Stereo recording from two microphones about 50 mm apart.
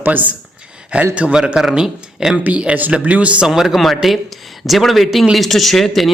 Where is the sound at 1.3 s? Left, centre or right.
Centre.